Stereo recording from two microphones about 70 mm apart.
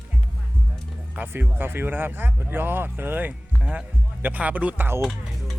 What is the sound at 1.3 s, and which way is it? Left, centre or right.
Speech, right.